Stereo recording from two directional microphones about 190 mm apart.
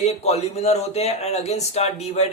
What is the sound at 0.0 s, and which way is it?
Speech, 35° left (ahead or behind).